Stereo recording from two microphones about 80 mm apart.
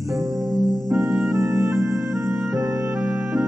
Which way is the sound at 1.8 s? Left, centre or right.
Right.